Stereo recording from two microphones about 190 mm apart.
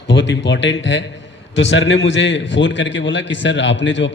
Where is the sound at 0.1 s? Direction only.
70° left (ahead or behind).